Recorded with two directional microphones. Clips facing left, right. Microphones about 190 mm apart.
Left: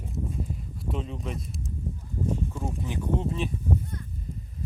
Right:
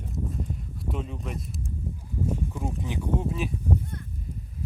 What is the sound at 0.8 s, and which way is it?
Speech, centre (ahead or behind).